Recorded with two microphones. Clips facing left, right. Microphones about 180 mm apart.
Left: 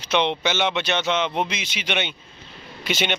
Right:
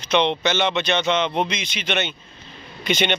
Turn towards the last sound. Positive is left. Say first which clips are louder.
# right 3 dB
turn(degrees=5)  # may be behind; listen again after turning